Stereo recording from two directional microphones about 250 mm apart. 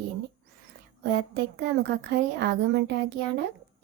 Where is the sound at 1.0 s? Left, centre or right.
Right.